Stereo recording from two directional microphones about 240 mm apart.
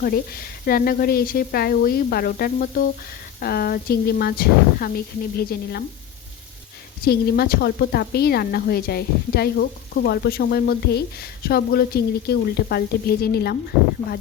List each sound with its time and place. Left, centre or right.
0.0 s a woman's voice: left
7.0 s a woman's voice: left